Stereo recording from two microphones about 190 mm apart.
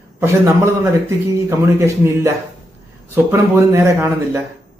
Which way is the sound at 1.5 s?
15° right (ahead or behind).